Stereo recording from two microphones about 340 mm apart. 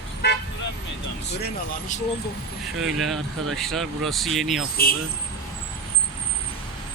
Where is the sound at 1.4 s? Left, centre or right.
Left.